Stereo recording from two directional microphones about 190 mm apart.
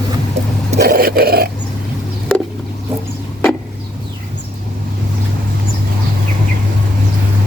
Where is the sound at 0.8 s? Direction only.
50° right (ahead or behind).